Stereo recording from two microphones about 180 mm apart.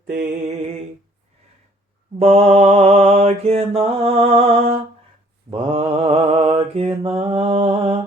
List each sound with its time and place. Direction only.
2.1 s mantra: 35° right (ahead or behind)